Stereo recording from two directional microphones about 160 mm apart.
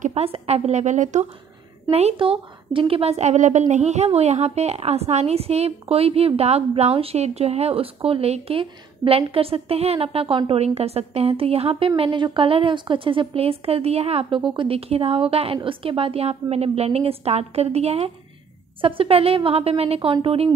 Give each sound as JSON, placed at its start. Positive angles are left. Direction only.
{"t": 0.0, "sound": "a woman's voice", "side_deg": -40}